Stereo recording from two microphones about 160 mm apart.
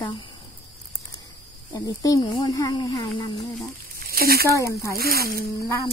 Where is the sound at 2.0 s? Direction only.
25° left (ahead or behind).